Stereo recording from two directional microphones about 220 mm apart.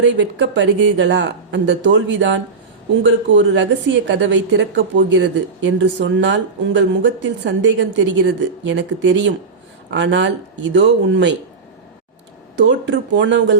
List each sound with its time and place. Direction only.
0.0 s a woman's voice: 55° right (ahead or behind)
12.6 s a woman's voice: 55° right (ahead or behind)